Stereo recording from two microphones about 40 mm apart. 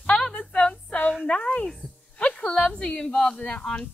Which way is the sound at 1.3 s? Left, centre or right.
Left.